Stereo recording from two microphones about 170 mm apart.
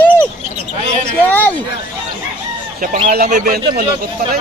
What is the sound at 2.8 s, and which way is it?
Speech, 55° right (ahead or behind).